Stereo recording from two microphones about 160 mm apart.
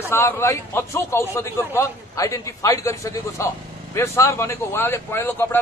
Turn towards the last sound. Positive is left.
turn(degrees=15)  # may be behind; listen again after turning